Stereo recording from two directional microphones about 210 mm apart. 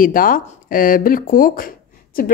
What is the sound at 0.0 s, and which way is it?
Speech, 40° left (ahead or behind).